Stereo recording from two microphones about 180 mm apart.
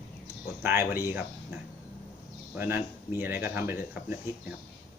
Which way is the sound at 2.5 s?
10° right (ahead or behind).